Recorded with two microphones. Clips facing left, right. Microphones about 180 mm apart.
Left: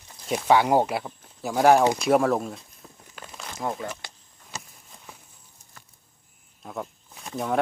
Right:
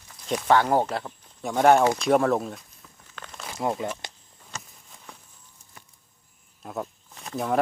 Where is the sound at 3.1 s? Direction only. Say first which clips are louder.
Right 1 dB; 10° left (ahead or behind).